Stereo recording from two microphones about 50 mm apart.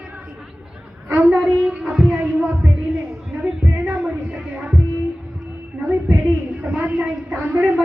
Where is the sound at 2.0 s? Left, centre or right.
Right.